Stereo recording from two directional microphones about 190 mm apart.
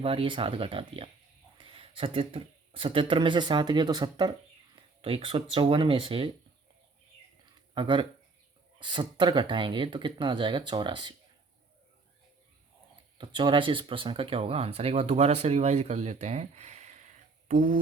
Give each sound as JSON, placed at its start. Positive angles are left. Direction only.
{"t": 0.0, "sound": "speech", "side_deg": -30}
{"t": 7.8, "sound": "speech", "side_deg": -25}
{"t": 13.1, "sound": "speech", "side_deg": -25}